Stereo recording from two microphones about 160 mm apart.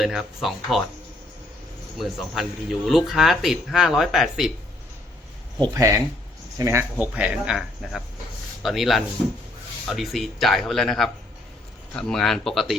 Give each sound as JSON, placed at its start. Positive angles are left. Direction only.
{"t": 0.0, "sound": "speech", "side_deg": 0}
{"t": 2.0, "sound": "speech", "side_deg": 0}
{"t": 5.7, "sound": "speech", "side_deg": -20}